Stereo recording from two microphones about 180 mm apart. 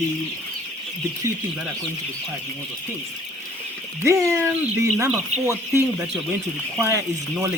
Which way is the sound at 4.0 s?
15° right (ahead or behind).